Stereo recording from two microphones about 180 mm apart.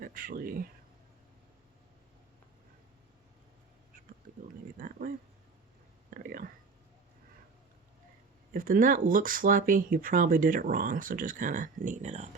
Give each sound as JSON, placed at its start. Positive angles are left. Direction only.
{"t": 0.0, "sound": "speech", "side_deg": -50}
{"t": 4.8, "sound": "speech", "side_deg": -50}
{"t": 8.5, "sound": "speech", "side_deg": -50}